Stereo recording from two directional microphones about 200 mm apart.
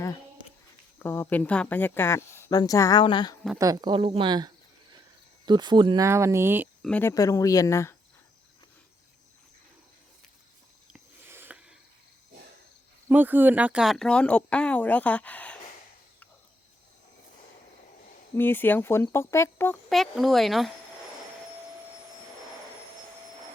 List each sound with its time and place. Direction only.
0.9 s a woman's voice: 10° left (ahead or behind)
3.6 s speech: 20° right (ahead or behind)
6.8 s a woman's voice: 5° left (ahead or behind)
10.9 s a sound: 10° right (ahead or behind)
13.1 s speech: 10° right (ahead or behind); by 15.5 s 5° left (ahead or behind)
18.3 s a woman's voice: 10° left (ahead or behind)
19.9 s speech: centre (ahead or behind)